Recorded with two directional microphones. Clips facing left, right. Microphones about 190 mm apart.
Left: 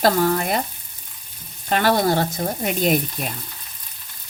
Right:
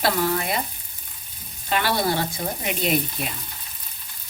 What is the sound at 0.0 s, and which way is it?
Speech, 45° left (ahead or behind).